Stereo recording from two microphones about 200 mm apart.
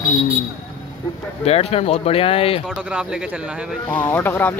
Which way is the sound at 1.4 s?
30° left (ahead or behind).